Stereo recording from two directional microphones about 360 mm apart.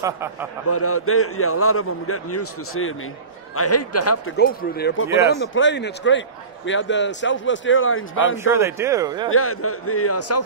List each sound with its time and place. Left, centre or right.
0.0 s speech: centre
0.7 s a man's voice: left
4.4 s a man's voice: left
8.5 s speech: centre
9.3 s a man's voice: left